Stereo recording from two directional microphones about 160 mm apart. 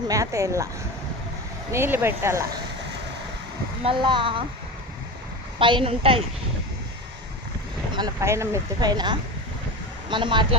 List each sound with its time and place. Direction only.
0.1 s speech: 20° right (ahead or behind)
1.7 s speech: 15° right (ahead or behind)
3.8 s a woman's voice: 30° right (ahead or behind)
5.5 s a woman's voice: 30° right (ahead or behind)
7.9 s a woman's voice: 20° right (ahead or behind)